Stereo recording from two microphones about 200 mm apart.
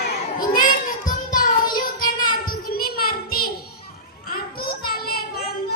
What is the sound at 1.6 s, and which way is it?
Child singing, 20° left (ahead or behind).